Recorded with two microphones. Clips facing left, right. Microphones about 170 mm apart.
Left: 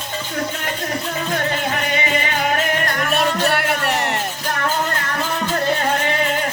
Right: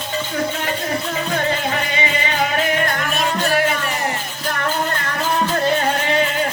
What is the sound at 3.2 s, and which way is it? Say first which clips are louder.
Music: right 2 dB; 65° left (ahead or behind).